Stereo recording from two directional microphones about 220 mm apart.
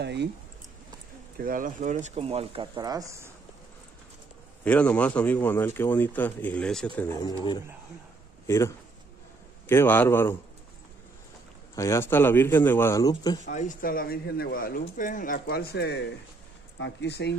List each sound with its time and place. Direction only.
0.0 s speech: 50° right (ahead or behind)
1.4 s speech: 40° right (ahead or behind); by 3.3 s 15° right (ahead or behind)
4.6 s speech: 5° left (ahead or behind)
8.5 s speech: 10° left (ahead or behind)
11.7 s speech: 15° left (ahead or behind)
13.5 s speech: 35° left (ahead or behind)